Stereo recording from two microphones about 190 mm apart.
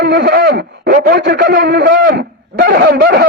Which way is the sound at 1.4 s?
45° right (ahead or behind).